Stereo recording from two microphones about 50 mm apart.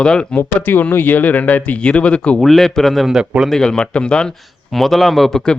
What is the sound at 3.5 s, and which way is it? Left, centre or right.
Speech, centre.